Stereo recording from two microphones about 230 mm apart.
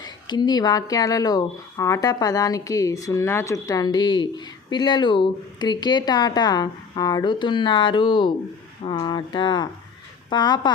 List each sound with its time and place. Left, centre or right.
0.0 s speech: centre